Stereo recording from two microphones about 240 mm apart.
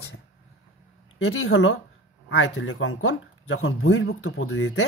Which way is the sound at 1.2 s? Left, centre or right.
Left.